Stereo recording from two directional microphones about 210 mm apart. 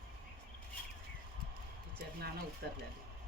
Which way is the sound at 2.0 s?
45° right (ahead or behind).